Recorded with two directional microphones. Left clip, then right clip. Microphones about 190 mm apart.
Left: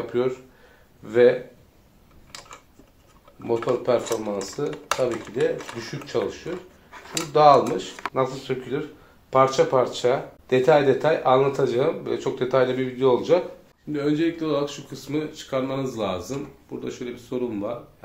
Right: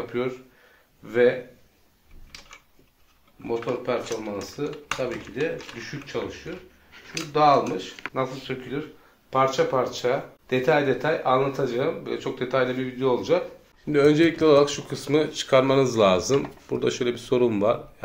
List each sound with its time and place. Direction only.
0.1 s speech: 10° right (ahead or behind)
3.6 s speech: 5° right (ahead or behind)
13.9 s speech: 35° right (ahead or behind)